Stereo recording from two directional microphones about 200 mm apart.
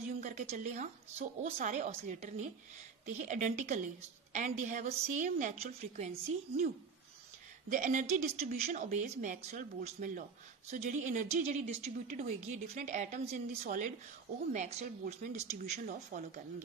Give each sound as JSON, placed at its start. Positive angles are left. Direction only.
{"t": 0.2, "sound": "a woman's voice", "side_deg": -35}
{"t": 7.7, "sound": "a woman's voice", "side_deg": -40}
{"t": 14.5, "sound": "a woman's voice", "side_deg": -35}